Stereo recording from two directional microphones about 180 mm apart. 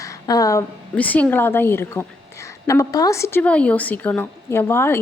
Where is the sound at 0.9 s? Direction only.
10° left (ahead or behind).